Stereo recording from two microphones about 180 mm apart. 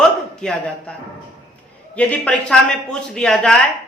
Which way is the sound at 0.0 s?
5° left (ahead or behind).